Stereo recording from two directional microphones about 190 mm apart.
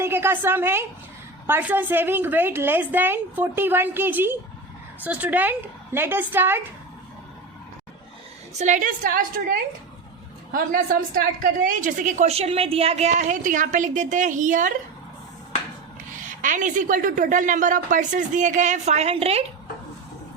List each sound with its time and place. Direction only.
0.0 s a woman's voice: 10° right (ahead or behind)
8.5 s a woman's voice: 40° right (ahead or behind)
16.2 s a woman's voice: 45° right (ahead or behind)